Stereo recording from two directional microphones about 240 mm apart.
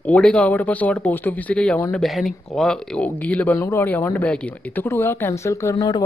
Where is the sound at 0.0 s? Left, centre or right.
Centre.